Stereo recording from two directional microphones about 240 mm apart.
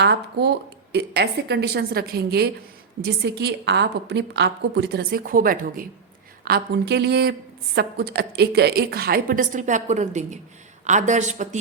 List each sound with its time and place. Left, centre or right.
0.0 s a woman's voice: right